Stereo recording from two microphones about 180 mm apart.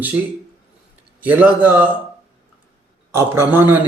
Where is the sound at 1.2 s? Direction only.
10° right (ahead or behind).